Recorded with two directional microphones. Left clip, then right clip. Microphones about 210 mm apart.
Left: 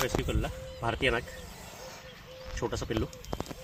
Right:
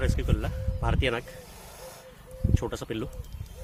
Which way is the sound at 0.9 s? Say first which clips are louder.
Even; 15° right (ahead or behind).